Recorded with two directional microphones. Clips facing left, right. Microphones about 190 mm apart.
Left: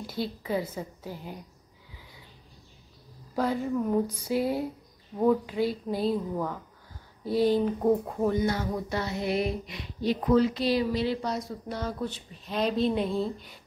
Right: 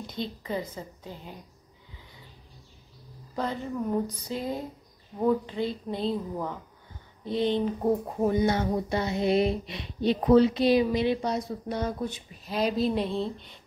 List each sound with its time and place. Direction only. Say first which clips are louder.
0.0 s a woman's voice: left 2 dB; 5° left (ahead or behind)
3.3 s a woman's voice: left 4 dB; 5° left (ahead or behind)
8.2 s speech: right 2 dB; 20° right (ahead or behind); by 13.6 s 5° left (ahead or behind)